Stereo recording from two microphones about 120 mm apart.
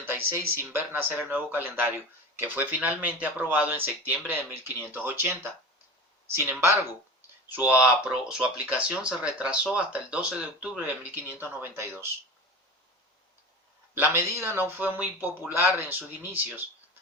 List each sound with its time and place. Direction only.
0.0 s speech: 20° right (ahead or behind)
14.0 s speech: 20° right (ahead or behind)